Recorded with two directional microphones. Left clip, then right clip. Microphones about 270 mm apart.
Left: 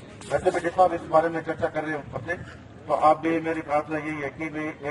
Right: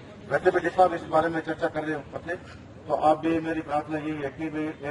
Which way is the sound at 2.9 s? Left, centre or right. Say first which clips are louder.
Left 2 dB; centre.